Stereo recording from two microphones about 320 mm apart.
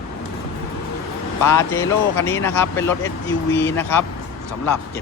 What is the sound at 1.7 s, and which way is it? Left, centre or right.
Speech, centre.